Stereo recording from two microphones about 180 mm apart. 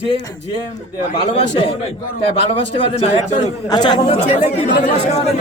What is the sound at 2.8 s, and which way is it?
Speech, 30° left (ahead or behind).